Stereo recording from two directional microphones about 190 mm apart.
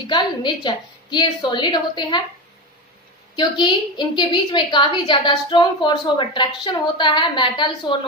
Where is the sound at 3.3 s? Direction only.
25° left (ahead or behind).